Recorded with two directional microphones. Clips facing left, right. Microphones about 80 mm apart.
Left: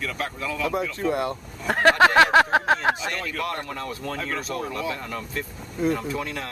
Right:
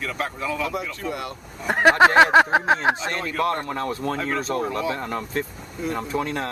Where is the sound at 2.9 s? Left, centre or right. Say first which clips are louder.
Right 2 dB; right.